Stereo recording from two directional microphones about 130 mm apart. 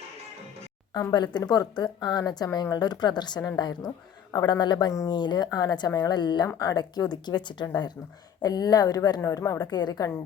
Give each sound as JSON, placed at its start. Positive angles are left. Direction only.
{"t": 0.9, "sound": "a woman's voice", "side_deg": 35}